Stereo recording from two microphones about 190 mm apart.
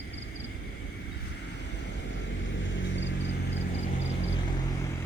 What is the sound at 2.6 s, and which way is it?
Vehicle, 75° left (ahead or behind).